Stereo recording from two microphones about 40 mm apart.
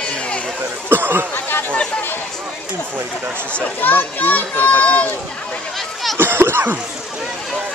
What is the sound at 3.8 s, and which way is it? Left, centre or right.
Speech, left.